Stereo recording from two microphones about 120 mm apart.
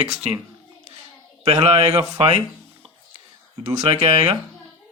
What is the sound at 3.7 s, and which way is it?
Speech, 60° right (ahead or behind).